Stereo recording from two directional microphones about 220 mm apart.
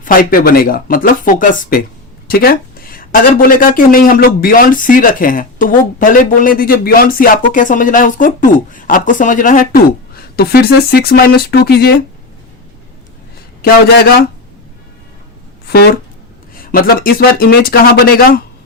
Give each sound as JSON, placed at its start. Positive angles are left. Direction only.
{"t": 0.0, "sound": "a woman's voice", "side_deg": 40}
{"t": 13.6, "sound": "speech", "side_deg": 45}
{"t": 15.6, "sound": "speech", "side_deg": 45}